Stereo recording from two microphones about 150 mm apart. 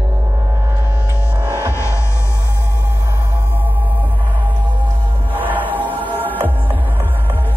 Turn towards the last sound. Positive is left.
turn(degrees=-10)  # may be behind; listen again after turning